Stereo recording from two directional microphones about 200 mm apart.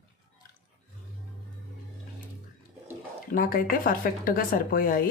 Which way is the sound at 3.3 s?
45° left (ahead or behind).